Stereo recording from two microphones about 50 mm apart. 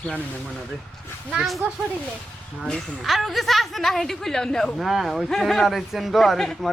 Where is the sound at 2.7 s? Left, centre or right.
Centre.